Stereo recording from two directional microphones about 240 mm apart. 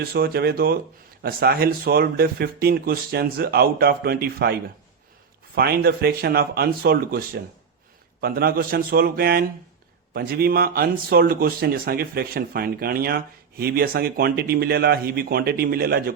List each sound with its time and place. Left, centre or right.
0.0 s speech: right
5.5 s speech: right